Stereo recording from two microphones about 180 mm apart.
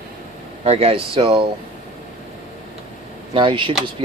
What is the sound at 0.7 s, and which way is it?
Speech, 35° right (ahead or behind).